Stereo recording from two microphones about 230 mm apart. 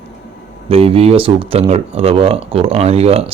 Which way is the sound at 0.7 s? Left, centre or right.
Right.